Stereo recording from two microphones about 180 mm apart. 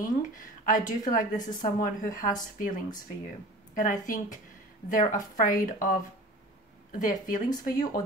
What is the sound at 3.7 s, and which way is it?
Speech, 45° left (ahead or behind).